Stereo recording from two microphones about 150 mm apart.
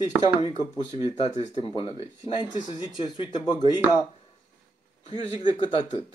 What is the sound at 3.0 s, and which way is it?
Speech, 30° left (ahead or behind).